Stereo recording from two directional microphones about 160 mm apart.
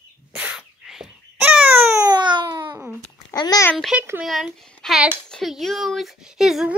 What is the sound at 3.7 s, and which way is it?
Speech, centre (ahead or behind).